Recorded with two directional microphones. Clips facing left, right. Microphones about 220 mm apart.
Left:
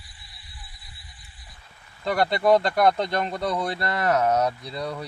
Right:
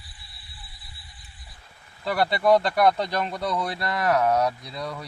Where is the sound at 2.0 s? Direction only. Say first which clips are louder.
Left 1 dB; 5° right (ahead or behind).